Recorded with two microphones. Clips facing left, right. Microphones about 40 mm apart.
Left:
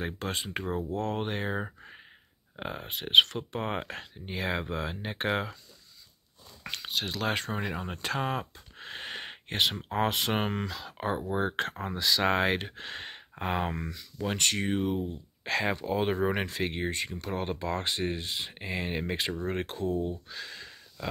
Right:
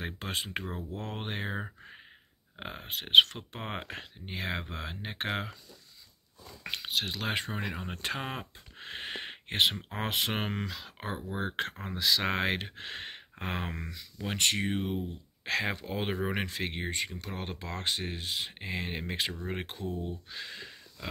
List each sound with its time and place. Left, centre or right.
0.0 s speech: centre
1.6 s speech: centre
6.7 s speech: centre
7.6 s speech: centre
8.0 s a sound: centre
9.8 s speech: centre
10.0 s speech: centre
14.2 s speech: centre
16.2 s speech: centre
20.2 s speech: centre